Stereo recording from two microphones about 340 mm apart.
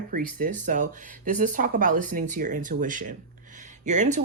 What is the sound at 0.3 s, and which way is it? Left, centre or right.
Speech, right.